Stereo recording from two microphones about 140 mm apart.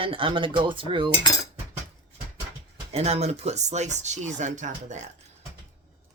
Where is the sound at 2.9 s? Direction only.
50° right (ahead or behind).